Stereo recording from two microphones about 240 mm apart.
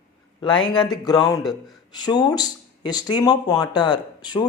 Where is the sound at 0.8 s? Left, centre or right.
Centre.